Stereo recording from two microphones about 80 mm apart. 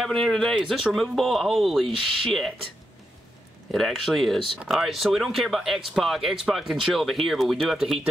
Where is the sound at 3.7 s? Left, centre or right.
Centre.